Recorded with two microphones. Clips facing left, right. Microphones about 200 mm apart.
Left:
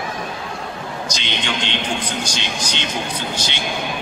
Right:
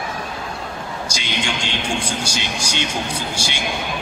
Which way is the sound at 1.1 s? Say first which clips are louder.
Left 1 dB; 10° right (ahead or behind).